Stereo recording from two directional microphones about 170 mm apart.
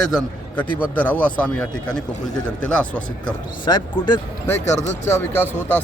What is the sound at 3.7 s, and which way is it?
Speech, 25° left (ahead or behind).